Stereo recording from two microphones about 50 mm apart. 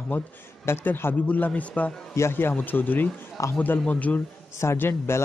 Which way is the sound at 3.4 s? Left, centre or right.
Left.